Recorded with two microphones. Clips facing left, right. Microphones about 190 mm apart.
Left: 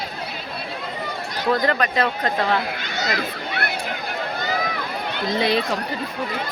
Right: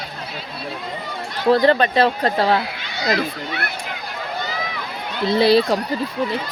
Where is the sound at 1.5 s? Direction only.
30° right (ahead or behind).